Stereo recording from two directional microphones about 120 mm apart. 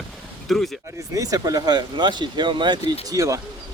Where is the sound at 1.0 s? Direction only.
30° right (ahead or behind).